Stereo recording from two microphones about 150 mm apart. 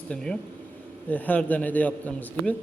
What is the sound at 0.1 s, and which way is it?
A man's voice, 5° left (ahead or behind).